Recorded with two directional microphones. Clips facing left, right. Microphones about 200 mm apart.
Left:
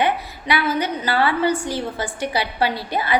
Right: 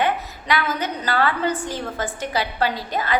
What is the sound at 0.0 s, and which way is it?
A woman's voice, 10° left (ahead or behind).